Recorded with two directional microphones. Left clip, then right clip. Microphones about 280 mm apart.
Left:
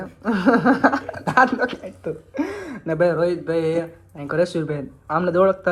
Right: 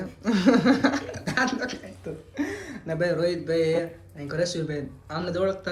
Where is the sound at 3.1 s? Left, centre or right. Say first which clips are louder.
Left 5 dB; centre.